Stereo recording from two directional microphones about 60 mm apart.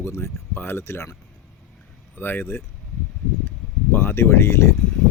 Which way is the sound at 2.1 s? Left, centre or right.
Left.